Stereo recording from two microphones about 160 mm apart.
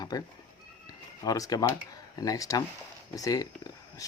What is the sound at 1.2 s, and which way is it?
Speech, 20° left (ahead or behind).